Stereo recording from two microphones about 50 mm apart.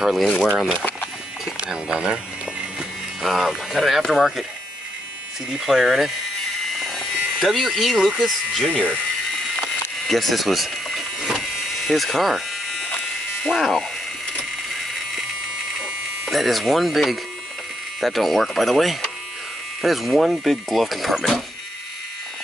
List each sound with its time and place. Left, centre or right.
0.0 s speech: centre
1.7 s speech: centre
3.2 s speech: centre
5.7 s speech: centre
6.8 s a sound: centre
8.2 s speech: centre
8.6 s speech: left
10.0 s power windows: centre
11.6 s a sound: centre
13.4 s speech: centre
16.3 s speech: centre